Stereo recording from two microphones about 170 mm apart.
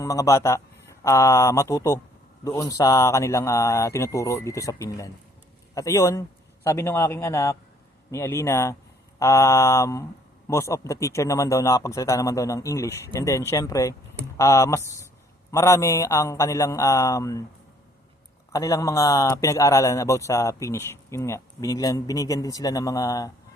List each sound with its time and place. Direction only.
0.0 s a man's voice: 20° left (ahead or behind)
18.5 s a man's voice: 20° left (ahead or behind)